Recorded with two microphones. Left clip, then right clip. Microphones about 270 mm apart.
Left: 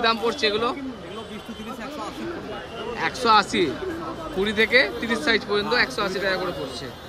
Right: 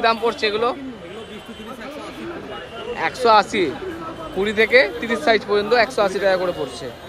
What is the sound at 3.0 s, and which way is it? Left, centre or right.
Speech, centre.